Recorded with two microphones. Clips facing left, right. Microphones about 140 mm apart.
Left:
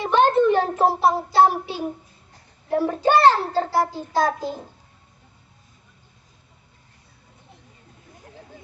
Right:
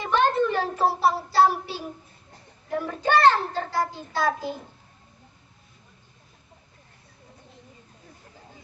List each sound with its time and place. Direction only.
0.0 s a sound: 25° left (ahead or behind)
0.9 s child singing: 20° left (ahead or behind)
2.6 s a child's voice: 30° left (ahead or behind)